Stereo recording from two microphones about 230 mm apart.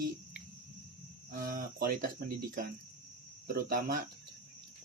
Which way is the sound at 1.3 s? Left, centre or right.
Right.